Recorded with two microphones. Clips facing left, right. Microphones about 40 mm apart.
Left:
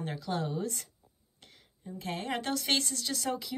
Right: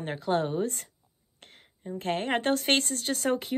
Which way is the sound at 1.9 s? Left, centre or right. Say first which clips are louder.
Right 7 dB; right.